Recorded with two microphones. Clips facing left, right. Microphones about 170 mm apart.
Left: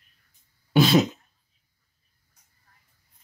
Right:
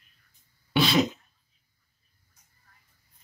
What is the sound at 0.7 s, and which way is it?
Throat clearing, 45° left (ahead or behind).